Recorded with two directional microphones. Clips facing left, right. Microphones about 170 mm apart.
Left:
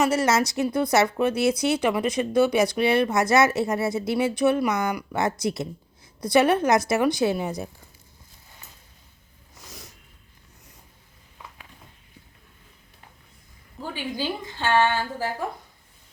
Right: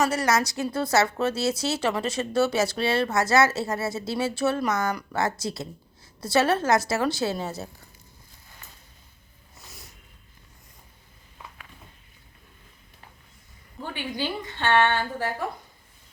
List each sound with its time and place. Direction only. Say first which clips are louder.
0.0 s speech: left 2 dB; 20° left (ahead or behind)
14.6 s speech: even; 5° left (ahead or behind)